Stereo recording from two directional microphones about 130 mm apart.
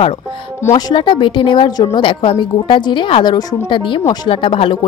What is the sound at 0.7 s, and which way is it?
A woman's voice, 35° left (ahead or behind).